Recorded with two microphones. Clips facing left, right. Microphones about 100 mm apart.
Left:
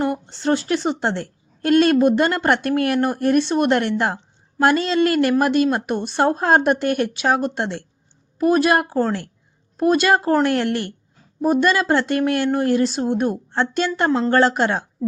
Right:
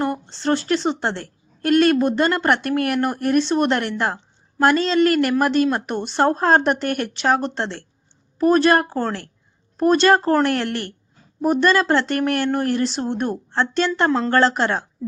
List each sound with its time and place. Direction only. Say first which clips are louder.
0.0 s a woman's voice: left 1 dB; 15° left (ahead or behind)